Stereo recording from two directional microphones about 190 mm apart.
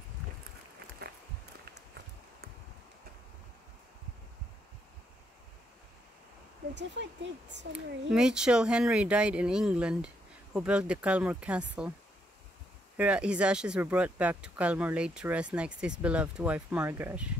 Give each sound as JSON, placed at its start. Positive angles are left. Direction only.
{"t": 6.7, "sound": "speech", "side_deg": -70}
{"t": 7.7, "sound": "speech", "side_deg": -5}
{"t": 12.9, "sound": "speech", "side_deg": -5}